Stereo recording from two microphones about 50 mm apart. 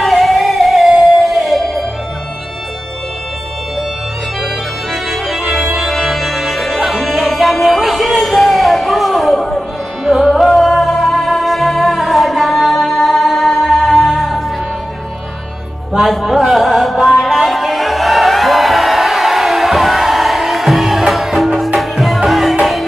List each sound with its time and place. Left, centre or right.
0.0 s music: centre
5.1 s organ: centre
5.9 s music: centre
15.9 s music: centre